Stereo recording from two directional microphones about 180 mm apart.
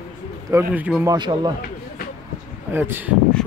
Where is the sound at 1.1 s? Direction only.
25° right (ahead or behind).